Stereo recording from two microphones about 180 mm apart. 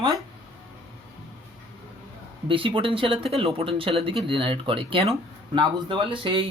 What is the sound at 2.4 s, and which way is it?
Speech, 30° right (ahead or behind).